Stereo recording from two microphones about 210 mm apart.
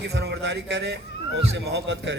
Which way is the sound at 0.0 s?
50° right (ahead or behind).